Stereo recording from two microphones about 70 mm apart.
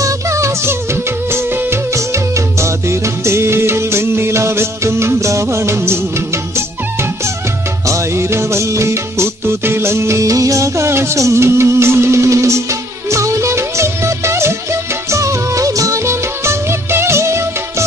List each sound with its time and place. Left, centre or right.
0.0 s music: right
7.9 s music: right